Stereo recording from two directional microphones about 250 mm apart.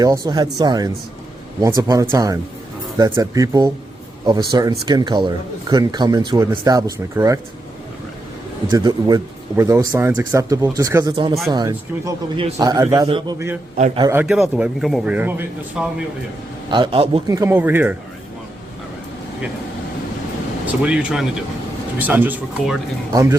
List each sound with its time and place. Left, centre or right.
0.0 s speech: centre
8.7 s speech: centre
13.7 s a man's voice: right
14.1 s a man's voice: centre
16.6 s speech: centre
20.8 s a man's voice: centre